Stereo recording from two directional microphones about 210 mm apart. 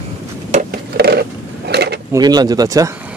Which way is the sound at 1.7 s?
50° right (ahead or behind).